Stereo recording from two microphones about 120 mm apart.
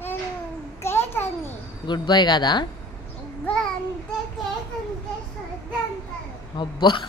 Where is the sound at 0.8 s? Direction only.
20° left (ahead or behind).